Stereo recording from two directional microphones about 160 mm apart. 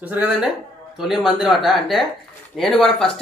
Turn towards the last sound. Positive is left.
turn(degrees=5)  # may be behind; listen again after turning